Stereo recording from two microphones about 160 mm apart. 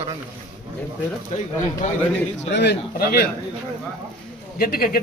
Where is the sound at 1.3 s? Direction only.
45° left (ahead or behind).